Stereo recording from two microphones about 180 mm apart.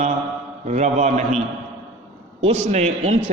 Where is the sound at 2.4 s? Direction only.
40° right (ahead or behind).